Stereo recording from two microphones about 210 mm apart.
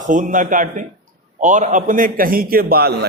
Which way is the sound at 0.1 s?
40° right (ahead or behind).